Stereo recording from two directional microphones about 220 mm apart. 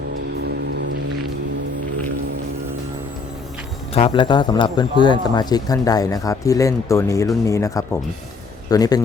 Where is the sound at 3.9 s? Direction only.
25° left (ahead or behind).